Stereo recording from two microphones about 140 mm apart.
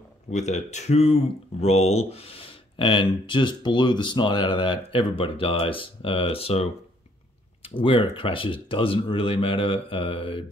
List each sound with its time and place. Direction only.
0.3 s speech: 55° left (ahead or behind); by 10.4 s 40° left (ahead or behind)